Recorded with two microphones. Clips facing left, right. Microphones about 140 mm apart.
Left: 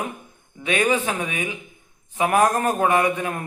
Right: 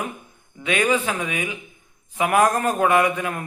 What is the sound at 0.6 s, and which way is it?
A man's voice, 30° left (ahead or behind).